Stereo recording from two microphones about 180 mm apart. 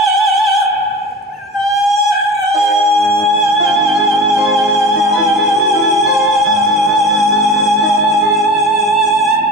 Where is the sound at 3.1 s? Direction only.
Centre (ahead or behind).